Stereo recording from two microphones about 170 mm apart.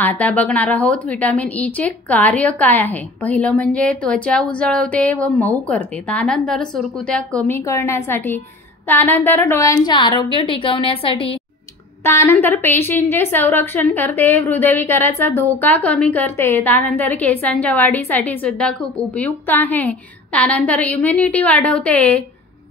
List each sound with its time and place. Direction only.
0.0 s a woman's voice: 10° left (ahead or behind); by 11.3 s 30° left (ahead or behind)
12.0 s a woman's voice: 15° left (ahead or behind)